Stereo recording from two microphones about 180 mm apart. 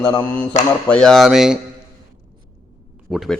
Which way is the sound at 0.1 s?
5° left (ahead or behind).